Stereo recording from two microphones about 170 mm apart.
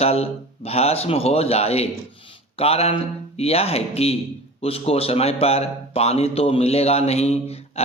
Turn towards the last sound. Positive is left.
turn(degrees=35)  # may be behind; listen again after turning